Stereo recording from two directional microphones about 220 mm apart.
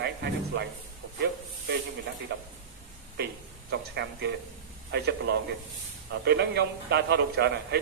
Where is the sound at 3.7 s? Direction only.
50° right (ahead or behind).